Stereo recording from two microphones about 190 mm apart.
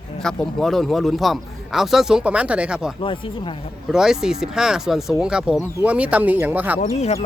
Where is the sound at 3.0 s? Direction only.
25° left (ahead or behind).